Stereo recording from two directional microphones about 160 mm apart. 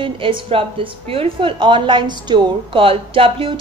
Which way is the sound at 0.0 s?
35° right (ahead or behind).